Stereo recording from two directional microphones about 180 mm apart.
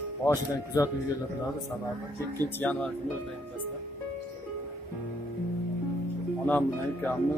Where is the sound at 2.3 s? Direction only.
10° left (ahead or behind).